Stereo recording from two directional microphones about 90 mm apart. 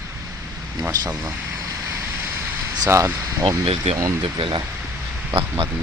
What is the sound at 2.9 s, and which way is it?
Speech, 30° right (ahead or behind).